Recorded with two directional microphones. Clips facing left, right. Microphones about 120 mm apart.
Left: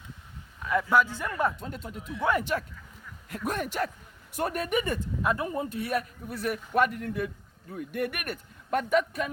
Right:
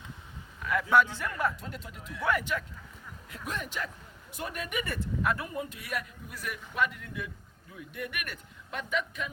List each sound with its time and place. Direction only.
0.6 s a man's voice: 25° left (ahead or behind)
0.9 s a man's voice: 5° left (ahead or behind)
1.3 s speech: 25° left (ahead or behind)
1.6 s a man's voice: 40° left (ahead or behind)
4.9 s a man's voice: 20° left (ahead or behind); by 9.3 s 45° left (ahead or behind)